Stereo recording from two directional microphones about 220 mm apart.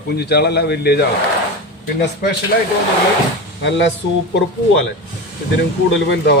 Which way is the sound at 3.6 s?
55° left (ahead or behind).